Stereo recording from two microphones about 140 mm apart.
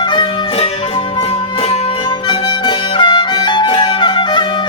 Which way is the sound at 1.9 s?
35° left (ahead or behind).